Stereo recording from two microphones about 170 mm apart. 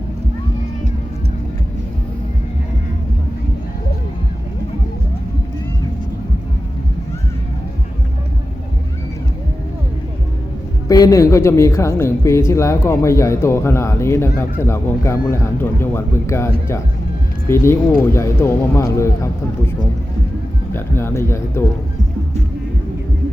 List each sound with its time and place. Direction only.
10.8 s a woman's voice: 20° left (ahead or behind)
20.7 s a woman's voice: 15° left (ahead or behind)